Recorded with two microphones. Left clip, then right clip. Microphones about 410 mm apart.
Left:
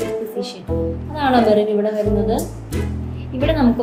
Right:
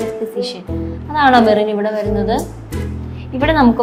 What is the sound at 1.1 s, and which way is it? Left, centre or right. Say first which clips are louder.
A woman's voice: right 5 dB; right.